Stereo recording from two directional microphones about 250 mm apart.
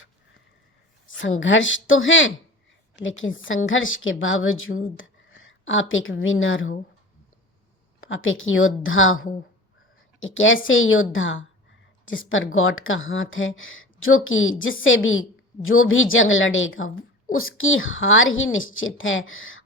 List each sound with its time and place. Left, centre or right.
1.0 s a woman's voice: left
8.0 s a woman's voice: left